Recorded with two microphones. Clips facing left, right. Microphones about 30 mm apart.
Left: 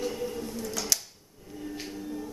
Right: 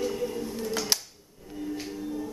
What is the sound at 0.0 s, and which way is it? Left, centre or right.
Music, centre.